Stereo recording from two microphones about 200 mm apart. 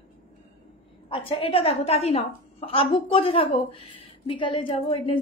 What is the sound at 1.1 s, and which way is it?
A woman's voice, 25° left (ahead or behind).